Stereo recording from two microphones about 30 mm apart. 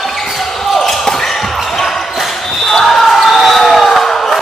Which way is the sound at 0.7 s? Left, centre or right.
Centre.